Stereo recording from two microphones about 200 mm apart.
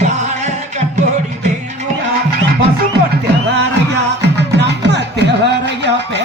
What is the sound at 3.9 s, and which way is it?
Music, 60° right (ahead or behind).